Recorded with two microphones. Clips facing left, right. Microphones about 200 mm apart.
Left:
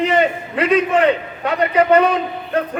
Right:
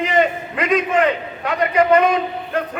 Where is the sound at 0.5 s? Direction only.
35° left (ahead or behind).